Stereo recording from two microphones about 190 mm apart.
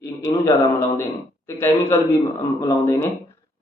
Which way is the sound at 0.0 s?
15° left (ahead or behind).